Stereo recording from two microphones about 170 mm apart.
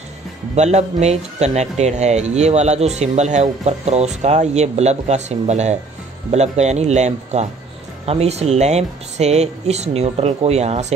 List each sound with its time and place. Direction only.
0.6 s speech: 40° right (ahead or behind)